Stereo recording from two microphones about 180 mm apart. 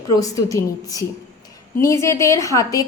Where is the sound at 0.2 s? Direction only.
20° left (ahead or behind).